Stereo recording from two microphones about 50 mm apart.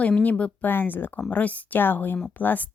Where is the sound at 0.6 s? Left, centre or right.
Left.